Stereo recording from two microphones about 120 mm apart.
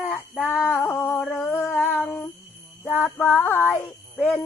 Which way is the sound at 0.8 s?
15° left (ahead or behind).